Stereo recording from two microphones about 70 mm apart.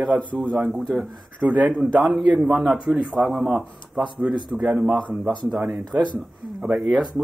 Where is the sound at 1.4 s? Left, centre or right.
Right.